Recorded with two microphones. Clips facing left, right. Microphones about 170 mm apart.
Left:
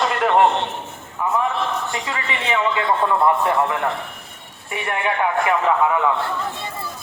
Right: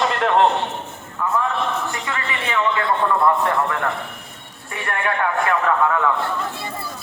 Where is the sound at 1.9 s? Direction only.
20° left (ahead or behind).